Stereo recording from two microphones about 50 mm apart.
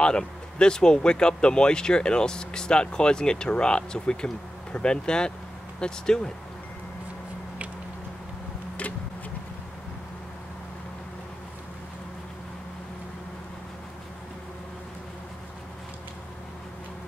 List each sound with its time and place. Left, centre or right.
0.0 s speech: centre